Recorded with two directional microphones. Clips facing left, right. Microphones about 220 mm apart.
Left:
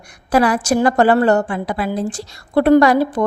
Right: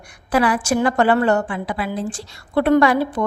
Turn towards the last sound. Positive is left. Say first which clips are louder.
# left 4 dB
turn(degrees=40)  # may be behind; listen again after turning